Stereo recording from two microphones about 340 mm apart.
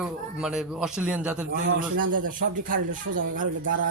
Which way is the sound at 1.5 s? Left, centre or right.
Right.